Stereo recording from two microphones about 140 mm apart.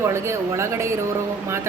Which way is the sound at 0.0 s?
20° right (ahead or behind).